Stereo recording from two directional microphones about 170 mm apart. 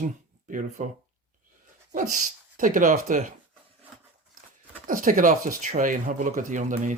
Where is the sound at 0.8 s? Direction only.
45° right (ahead or behind).